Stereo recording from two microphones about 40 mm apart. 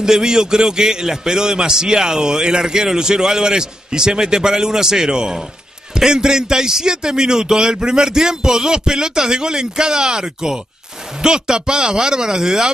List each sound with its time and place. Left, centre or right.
0.0 s a man's voice: centre